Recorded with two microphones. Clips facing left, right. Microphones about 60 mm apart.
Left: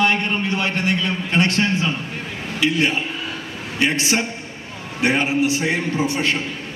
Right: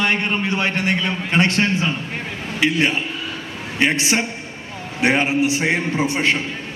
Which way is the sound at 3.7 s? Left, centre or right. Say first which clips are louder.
Right 1 dB; right.